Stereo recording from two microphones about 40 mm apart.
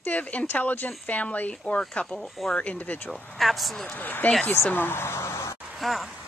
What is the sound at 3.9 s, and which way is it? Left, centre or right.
Speech, left.